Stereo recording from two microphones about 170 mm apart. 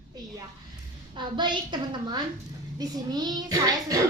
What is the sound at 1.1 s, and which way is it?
A child's voice, 25° right (ahead or behind).